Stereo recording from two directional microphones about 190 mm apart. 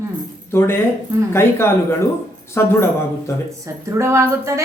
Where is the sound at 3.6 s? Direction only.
15° right (ahead or behind).